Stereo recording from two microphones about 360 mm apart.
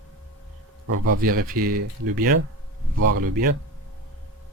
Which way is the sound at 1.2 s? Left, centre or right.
Right.